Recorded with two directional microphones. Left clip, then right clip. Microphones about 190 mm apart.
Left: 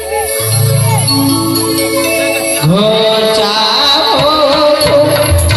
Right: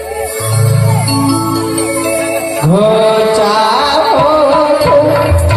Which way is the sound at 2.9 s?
40° right (ahead or behind).